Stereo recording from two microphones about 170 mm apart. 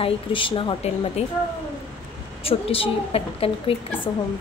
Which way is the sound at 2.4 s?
35° left (ahead or behind).